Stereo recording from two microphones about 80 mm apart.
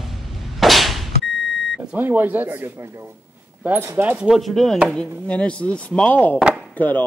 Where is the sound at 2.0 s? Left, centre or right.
Right.